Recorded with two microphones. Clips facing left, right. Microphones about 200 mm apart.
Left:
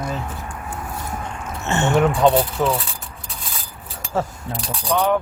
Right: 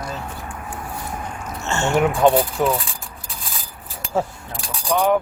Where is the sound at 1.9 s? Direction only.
10° right (ahead or behind).